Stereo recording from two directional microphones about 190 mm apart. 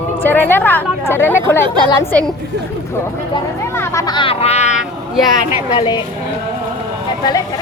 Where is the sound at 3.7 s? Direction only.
15° left (ahead or behind); by 4.8 s 35° left (ahead or behind).